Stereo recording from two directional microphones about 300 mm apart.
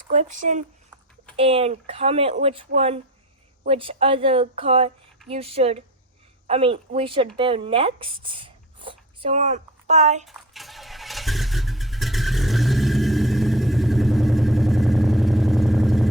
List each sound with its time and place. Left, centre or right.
0.1 s a woman's voice: right
10.2 s vehicle: centre